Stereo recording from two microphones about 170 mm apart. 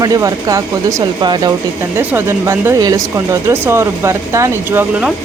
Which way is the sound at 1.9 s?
15° right (ahead or behind).